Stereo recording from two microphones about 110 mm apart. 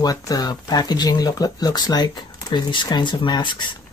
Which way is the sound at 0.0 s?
35° left (ahead or behind).